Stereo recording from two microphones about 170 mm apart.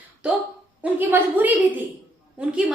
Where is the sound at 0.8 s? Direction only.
10° right (ahead or behind).